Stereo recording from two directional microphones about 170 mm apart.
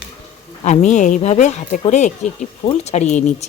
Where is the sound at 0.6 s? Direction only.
45° left (ahead or behind).